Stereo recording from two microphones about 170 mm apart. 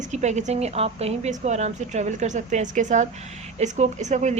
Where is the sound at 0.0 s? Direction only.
45° right (ahead or behind).